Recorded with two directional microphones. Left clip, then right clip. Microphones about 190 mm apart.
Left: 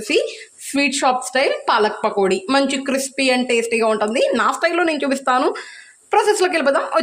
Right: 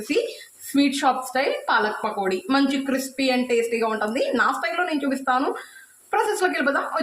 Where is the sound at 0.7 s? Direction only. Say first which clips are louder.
Left 4 dB; 50° left (ahead or behind).